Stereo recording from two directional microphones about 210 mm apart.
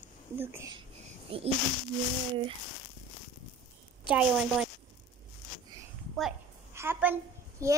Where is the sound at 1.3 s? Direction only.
25° right (ahead or behind).